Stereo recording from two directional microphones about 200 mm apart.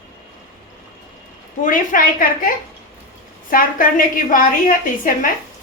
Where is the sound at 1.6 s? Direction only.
40° left (ahead or behind).